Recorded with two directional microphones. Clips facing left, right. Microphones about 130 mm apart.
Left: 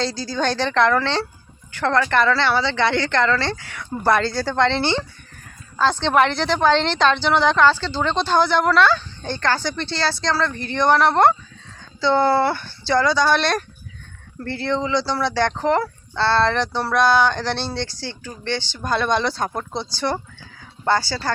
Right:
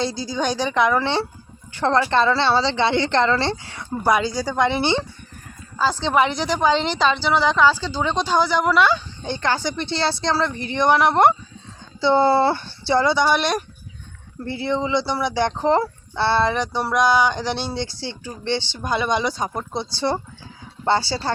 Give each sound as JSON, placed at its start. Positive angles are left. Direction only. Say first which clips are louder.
{"t": 0.0, "sound": "a woman's voice", "louder": "left 1 dB", "side_deg": -20}
{"t": 4.0, "sound": "speech", "louder": "left 1 dB", "side_deg": -15}
{"t": 5.7, "sound": "a woman's voice", "louder": "left 2 dB", "side_deg": -5}
{"t": 13.2, "sound": "speech", "louder": "left 1 dB", "side_deg": -10}
{"t": 20.8, "sound": "a woman's voice", "louder": "even", "side_deg": -25}